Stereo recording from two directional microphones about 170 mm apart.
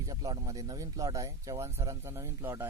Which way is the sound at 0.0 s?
20° right (ahead or behind).